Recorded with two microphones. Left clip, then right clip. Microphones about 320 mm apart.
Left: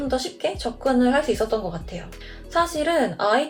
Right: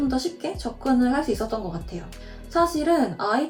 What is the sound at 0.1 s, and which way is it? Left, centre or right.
A woman's voice, centre.